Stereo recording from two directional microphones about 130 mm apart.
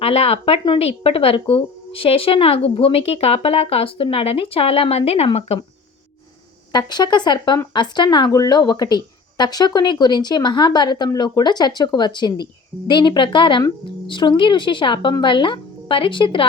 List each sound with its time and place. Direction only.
0.0 s a woman's voice: 50° left (ahead or behind)
6.7 s speech: 35° left (ahead or behind)